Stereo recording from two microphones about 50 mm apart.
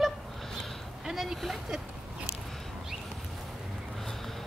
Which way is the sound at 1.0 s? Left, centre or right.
Centre.